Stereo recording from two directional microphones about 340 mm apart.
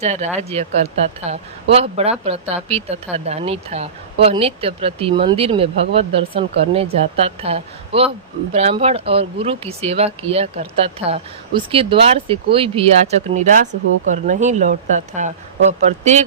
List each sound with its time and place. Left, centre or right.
0.0 s speech: centre